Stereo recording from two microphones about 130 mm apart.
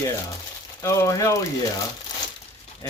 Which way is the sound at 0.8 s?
25° left (ahead or behind).